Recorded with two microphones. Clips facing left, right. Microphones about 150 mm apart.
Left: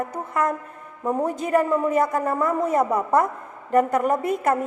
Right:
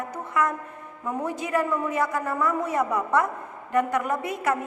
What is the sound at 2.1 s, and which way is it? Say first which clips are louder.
Speech: left 3 dB; 30° left (ahead or behind).